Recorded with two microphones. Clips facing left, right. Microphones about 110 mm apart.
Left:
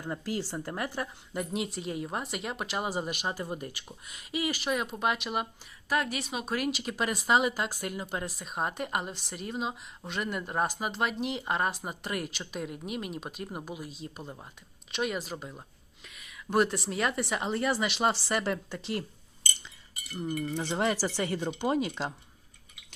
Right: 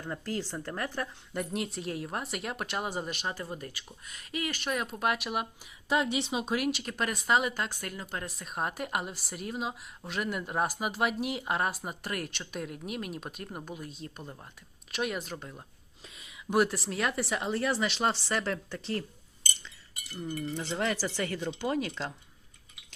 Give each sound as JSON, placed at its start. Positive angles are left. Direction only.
{"t": 0.0, "sound": "speech", "side_deg": 10}
{"t": 3.2, "sound": "speech", "side_deg": 15}
{"t": 5.9, "sound": "speech", "side_deg": -25}
{"t": 6.5, "sound": "speech", "side_deg": 0}
{"t": 8.3, "sound": "speech", "side_deg": 0}
{"t": 16.0, "sound": "a sound", "side_deg": -30}
{"t": 16.5, "sound": "speech", "side_deg": -5}
{"t": 20.6, "sound": "speech", "side_deg": 20}